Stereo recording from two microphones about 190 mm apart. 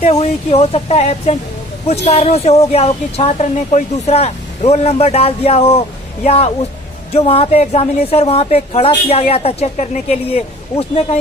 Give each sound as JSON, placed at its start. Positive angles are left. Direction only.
{"t": 0.0, "sound": "a woman's voice", "side_deg": 35}